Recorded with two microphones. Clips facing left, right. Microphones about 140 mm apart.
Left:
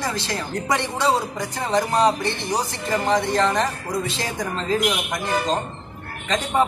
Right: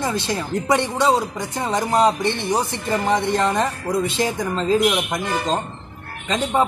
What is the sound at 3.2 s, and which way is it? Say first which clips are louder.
Speech: right 1 dB; 15° right (ahead or behind).